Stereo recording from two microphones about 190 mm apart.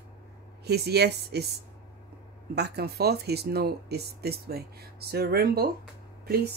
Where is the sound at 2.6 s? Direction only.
60° right (ahead or behind).